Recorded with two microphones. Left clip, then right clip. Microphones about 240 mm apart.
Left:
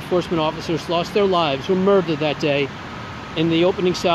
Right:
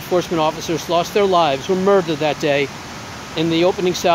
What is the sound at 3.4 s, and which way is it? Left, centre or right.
Speech, right.